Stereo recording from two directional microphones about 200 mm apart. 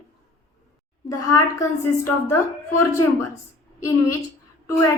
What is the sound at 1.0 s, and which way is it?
Speech, 15° left (ahead or behind).